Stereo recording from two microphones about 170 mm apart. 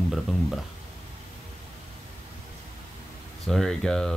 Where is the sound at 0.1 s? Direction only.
Centre (ahead or behind).